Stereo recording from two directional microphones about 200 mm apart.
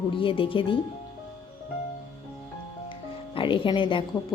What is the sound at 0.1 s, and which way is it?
Speech, 25° left (ahead or behind).